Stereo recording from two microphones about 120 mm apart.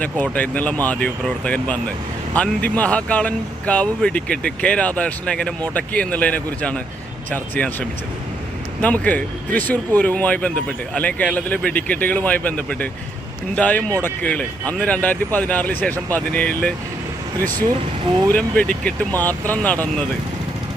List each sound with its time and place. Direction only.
0.0 s speech: 10° left (ahead or behind)
18.3 s speech: 10° left (ahead or behind)